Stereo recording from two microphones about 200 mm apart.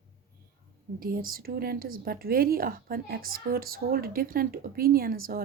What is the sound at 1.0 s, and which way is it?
Speech, 45° right (ahead or behind).